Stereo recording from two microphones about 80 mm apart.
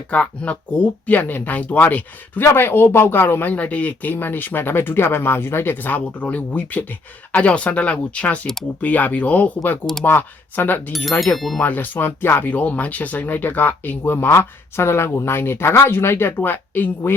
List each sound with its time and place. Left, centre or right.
0.1 s speech: centre
10.9 s speech: centre
11.6 s speech: left